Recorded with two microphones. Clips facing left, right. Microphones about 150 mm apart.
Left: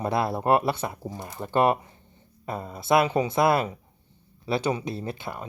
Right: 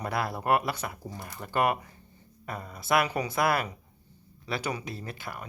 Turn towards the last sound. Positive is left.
turn(degrees=25)  # may be behind; listen again after turning